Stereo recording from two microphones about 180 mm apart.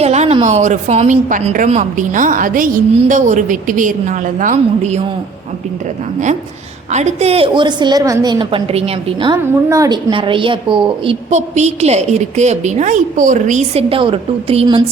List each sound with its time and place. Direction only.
0.0 s a woman's voice: 35° right (ahead or behind)
6.9 s a woman's voice: 40° right (ahead or behind)